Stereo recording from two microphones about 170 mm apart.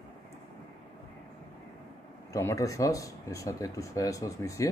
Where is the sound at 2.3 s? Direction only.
20° left (ahead or behind).